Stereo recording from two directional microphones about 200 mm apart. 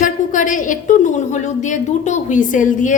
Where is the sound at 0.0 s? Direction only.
40° left (ahead or behind).